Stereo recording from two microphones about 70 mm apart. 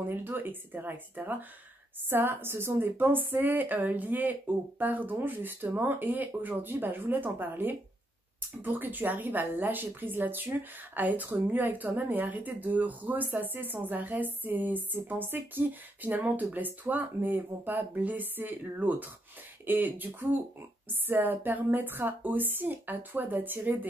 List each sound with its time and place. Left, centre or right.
0.0 s speech: right